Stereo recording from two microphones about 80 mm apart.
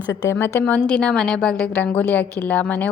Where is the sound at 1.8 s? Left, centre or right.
Left.